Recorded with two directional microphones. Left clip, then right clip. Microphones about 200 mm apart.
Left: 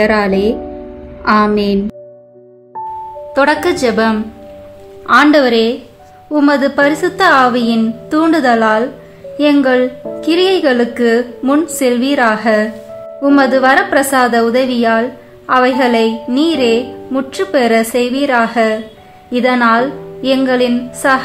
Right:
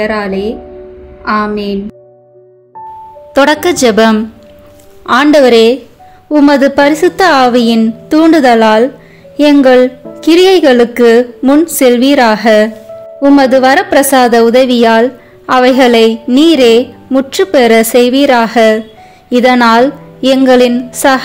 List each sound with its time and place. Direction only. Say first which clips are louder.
0.0 s speech: left 2 dB; 10° left (ahead or behind)
3.3 s a woman's voice: right 4 dB; 35° right (ahead or behind)